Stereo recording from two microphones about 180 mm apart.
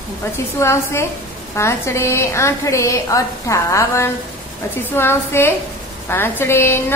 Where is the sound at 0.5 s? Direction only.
15° left (ahead or behind).